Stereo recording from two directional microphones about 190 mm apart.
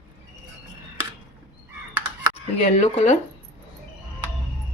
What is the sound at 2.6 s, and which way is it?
Speech, 35° left (ahead or behind).